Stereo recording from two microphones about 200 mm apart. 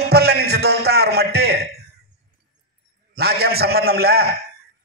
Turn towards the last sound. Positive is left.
turn(degrees=-50)  # may be behind; listen again after turning